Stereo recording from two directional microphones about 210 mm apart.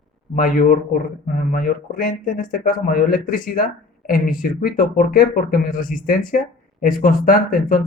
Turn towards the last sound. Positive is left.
turn(degrees=40)  # may be behind; listen again after turning